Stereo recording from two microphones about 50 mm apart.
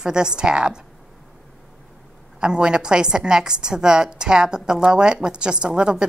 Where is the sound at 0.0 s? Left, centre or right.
Centre.